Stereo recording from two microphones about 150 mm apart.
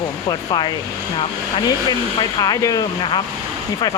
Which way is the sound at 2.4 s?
25° left (ahead or behind).